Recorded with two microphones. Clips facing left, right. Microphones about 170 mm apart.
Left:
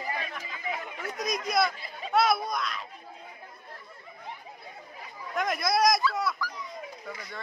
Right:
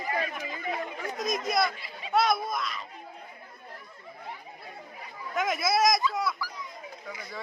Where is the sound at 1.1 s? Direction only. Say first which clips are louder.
Even; centre (ahead or behind).